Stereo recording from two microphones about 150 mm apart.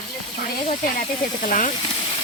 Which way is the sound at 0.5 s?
40° left (ahead or behind).